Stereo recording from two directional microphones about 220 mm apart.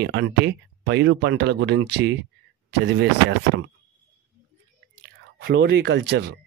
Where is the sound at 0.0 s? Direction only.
50° right (ahead or behind).